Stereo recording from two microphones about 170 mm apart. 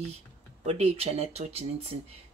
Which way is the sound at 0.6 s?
35° right (ahead or behind).